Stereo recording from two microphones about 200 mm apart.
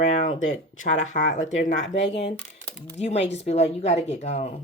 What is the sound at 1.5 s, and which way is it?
Speech, 65° left (ahead or behind).